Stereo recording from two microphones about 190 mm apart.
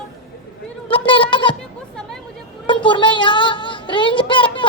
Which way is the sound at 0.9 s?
25° left (ahead or behind).